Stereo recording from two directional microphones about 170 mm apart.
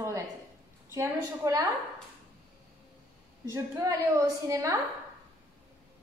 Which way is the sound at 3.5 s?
20° right (ahead or behind).